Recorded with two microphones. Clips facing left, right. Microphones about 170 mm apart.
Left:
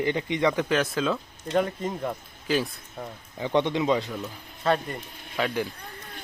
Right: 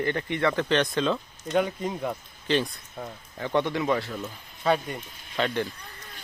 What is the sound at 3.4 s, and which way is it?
Speech, 20° left (ahead or behind).